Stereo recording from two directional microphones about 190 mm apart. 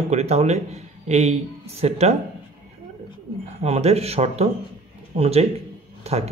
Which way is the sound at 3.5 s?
35° right (ahead or behind).